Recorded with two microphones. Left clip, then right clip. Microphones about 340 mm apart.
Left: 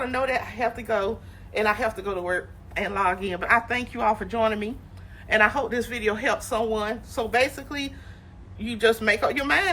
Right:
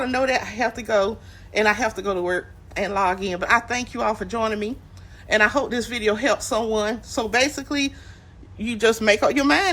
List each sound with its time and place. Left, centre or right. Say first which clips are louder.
0.0 s speech: right 4 dB; centre